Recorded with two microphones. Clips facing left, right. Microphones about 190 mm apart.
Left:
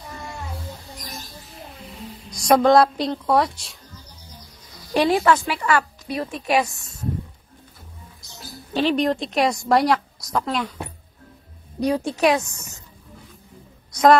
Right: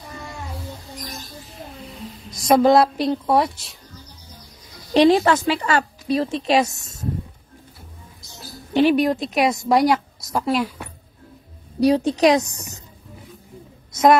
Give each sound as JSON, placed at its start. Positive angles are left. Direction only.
{"t": 2.4, "sound": "a woman's voice", "side_deg": -5}
{"t": 4.9, "sound": "a woman's voice", "side_deg": -25}
{"t": 6.6, "sound": "speech", "side_deg": -40}
{"t": 8.7, "sound": "a woman's voice", "side_deg": -10}
{"t": 9.0, "sound": "a woman's voice", "side_deg": 0}
{"t": 12.0, "sound": "a woman's voice", "side_deg": -20}